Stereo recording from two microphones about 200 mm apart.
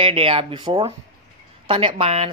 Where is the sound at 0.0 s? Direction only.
25° right (ahead or behind).